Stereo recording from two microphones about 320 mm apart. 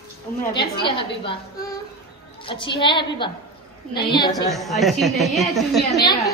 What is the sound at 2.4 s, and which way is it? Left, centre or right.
A woman's voice, centre.